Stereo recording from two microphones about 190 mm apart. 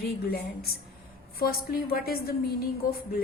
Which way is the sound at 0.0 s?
55° left (ahead or behind).